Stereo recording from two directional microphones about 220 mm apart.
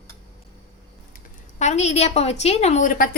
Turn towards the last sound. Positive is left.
turn(degrees=40)  # may be behind; listen again after turning